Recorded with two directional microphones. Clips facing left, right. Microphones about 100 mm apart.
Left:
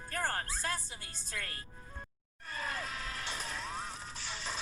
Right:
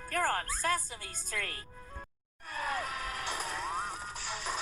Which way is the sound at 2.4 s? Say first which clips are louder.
Right 4 dB; 10° right (ahead or behind).